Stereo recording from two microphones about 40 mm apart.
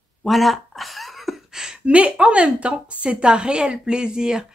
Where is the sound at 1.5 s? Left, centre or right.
Centre.